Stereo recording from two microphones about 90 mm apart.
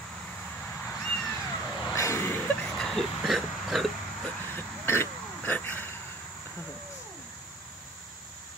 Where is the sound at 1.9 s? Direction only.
30° left (ahead or behind).